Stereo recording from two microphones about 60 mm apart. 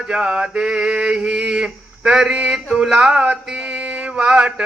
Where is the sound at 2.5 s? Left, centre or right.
Centre.